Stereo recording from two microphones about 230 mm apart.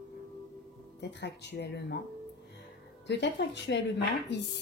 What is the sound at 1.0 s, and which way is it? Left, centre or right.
Speech, left.